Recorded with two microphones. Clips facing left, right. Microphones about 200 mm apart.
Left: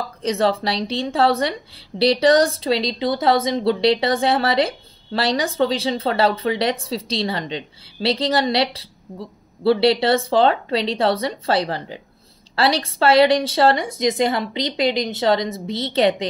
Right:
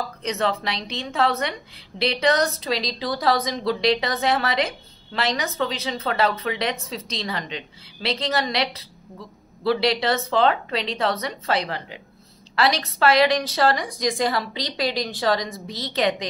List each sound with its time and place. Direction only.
0.2 s a woman's voice: 30° left (ahead or behind)